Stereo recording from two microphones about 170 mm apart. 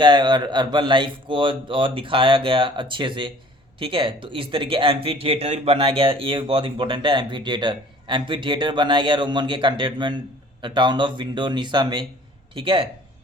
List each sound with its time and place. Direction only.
0.0 s speech: 25° right (ahead or behind)